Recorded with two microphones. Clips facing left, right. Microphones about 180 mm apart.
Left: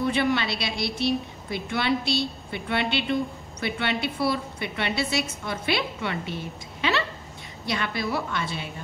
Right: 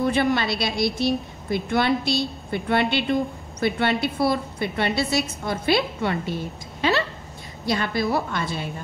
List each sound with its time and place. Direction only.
0.0 s a woman's voice: 45° right (ahead or behind)